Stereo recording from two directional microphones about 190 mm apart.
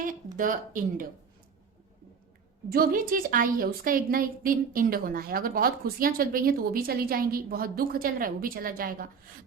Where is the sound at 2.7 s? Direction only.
50° right (ahead or behind).